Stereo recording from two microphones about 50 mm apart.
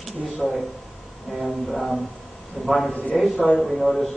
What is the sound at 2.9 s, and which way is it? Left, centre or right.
Speech, left.